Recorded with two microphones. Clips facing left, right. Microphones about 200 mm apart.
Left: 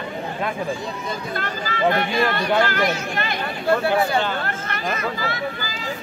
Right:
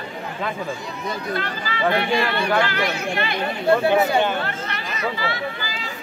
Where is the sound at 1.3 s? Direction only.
45° left (ahead or behind).